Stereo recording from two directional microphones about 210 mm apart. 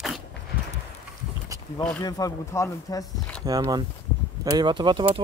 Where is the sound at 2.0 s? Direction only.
15° left (ahead or behind).